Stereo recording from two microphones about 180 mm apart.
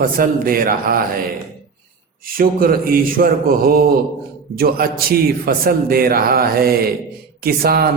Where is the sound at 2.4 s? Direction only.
55° right (ahead or behind).